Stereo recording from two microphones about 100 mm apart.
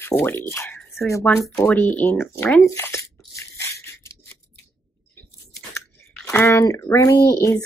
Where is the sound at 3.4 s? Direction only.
30° left (ahead or behind).